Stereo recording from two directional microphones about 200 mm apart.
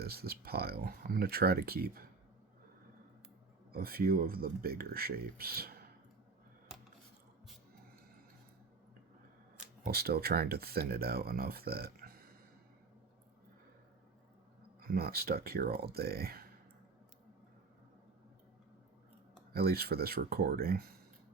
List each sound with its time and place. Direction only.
0.0 s speech: 50° right (ahead or behind)
3.7 s speech: 50° right (ahead or behind)
9.8 s speech: 50° right (ahead or behind)
14.8 s speech: 50° right (ahead or behind)
19.5 s speech: 50° right (ahead or behind)